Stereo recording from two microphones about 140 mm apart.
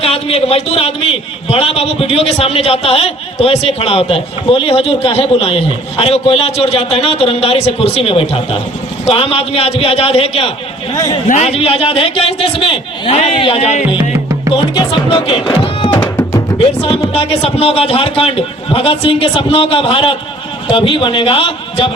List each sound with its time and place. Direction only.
0.0 s a man's voice: 45° left (ahead or behind)
10.9 s a man's voice: 30° left (ahead or behind)
11.3 s a man's voice: 50° left (ahead or behind)
15.1 s speech: 35° left (ahead or behind)
16.0 s music: 15° left (ahead or behind)
16.6 s a man's voice: 40° left (ahead or behind)